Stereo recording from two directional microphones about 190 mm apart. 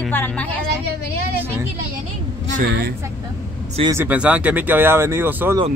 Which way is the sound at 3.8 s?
15° right (ahead or behind).